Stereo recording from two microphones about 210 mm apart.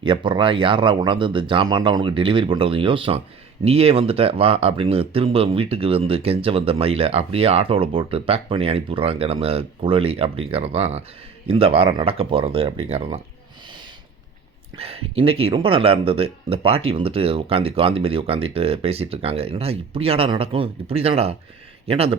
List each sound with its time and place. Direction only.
0.0 s speech: 25° right (ahead or behind)
14.8 s speech: 30° right (ahead or behind)